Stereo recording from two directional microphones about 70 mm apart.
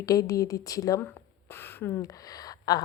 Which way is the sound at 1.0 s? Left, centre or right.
Left.